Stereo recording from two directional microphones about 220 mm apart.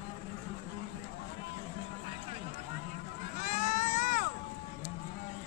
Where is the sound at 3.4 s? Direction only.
35° left (ahead or behind).